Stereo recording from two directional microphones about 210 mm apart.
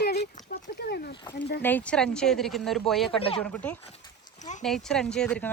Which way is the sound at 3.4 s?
5° left (ahead or behind).